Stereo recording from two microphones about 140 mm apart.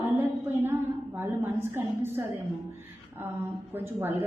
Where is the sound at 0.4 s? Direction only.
15° right (ahead or behind).